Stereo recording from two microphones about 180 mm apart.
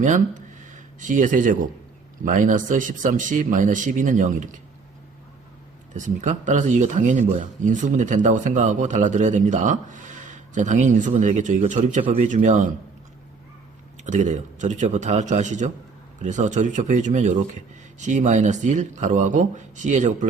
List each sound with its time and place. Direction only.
0.0 s speech: 45° right (ahead or behind)
5.9 s speech: 45° right (ahead or behind)
14.0 s a man's voice: 40° right (ahead or behind)